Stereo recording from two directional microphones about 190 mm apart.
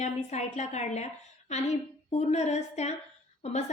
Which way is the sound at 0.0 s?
35° left (ahead or behind).